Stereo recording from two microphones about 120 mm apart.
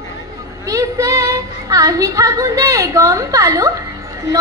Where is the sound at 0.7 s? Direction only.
30° right (ahead or behind).